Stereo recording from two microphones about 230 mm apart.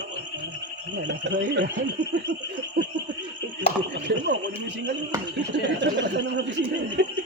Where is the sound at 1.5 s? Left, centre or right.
Right.